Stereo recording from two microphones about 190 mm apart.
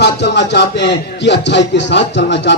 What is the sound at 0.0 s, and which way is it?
A man's voice, 65° left (ahead or behind).